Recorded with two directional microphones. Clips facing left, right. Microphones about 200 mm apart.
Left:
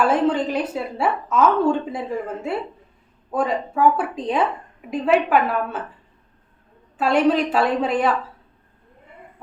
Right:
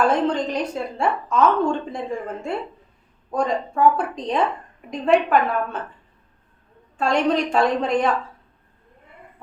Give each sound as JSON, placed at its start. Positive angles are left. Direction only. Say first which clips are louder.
{"t": 0.0, "sound": "speech", "louder": "left 1 dB", "side_deg": 5}
{"t": 6.9, "sound": "speech", "louder": "left 2 dB", "side_deg": 5}